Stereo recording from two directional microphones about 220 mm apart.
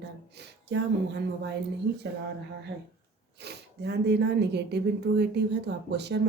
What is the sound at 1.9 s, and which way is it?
A woman's voice, 50° right (ahead or behind).